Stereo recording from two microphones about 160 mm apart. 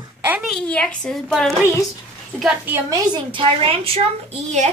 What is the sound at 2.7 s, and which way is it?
A woman's voice, 25° right (ahead or behind).